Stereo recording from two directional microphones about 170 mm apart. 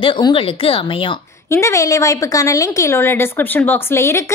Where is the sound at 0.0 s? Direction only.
30° left (ahead or behind).